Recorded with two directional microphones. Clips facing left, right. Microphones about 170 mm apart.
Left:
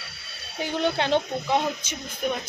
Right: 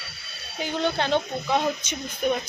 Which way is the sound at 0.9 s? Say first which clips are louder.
Left 1 dB; 25° left (ahead or behind).